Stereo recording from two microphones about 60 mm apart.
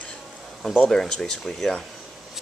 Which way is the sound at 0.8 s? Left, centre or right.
Centre.